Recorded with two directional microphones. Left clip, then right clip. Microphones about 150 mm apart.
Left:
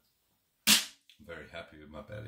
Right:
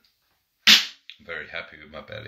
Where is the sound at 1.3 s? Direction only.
30° left (ahead or behind).